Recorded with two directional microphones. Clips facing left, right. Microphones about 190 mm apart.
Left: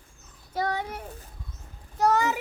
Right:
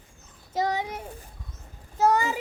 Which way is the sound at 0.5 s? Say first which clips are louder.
Right 2 dB; 20° right (ahead or behind).